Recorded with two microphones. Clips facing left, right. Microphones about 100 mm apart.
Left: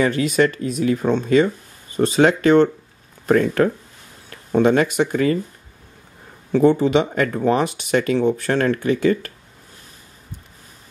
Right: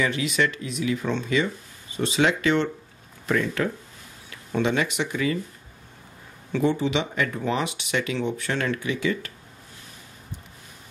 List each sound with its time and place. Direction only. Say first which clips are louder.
0.0 s speech: left 7 dB; 45° left (ahead or behind)
6.5 s speech: left 8 dB; 45° left (ahead or behind)